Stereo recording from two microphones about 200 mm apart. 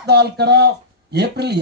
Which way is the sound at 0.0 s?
55° right (ahead or behind).